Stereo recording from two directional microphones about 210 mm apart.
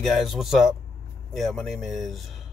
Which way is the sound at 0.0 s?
Centre (ahead or behind).